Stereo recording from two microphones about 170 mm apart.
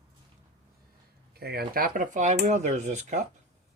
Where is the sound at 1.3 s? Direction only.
65° right (ahead or behind).